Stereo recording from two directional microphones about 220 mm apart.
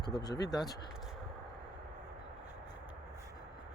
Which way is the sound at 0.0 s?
20° left (ahead or behind).